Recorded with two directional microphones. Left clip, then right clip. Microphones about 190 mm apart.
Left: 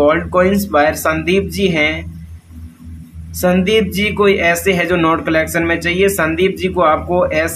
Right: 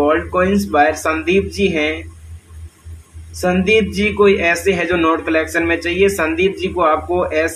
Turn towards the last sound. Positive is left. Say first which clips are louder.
# left 2 dB
turn(degrees=25)  # may be behind; listen again after turning